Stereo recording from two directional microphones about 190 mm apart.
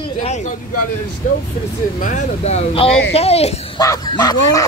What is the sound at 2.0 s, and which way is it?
Speech, 40° left (ahead or behind).